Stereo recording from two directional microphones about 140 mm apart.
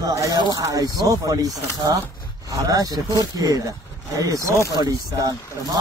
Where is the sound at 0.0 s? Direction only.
25° right (ahead or behind).